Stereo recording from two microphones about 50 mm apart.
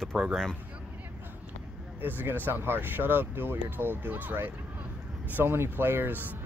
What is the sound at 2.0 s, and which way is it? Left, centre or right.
Speech, right.